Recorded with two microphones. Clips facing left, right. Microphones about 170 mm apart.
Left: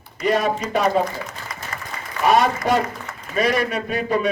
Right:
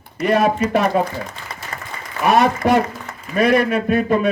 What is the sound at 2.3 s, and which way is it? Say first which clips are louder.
A man's voice: right 3 dB; 55° right (ahead or behind).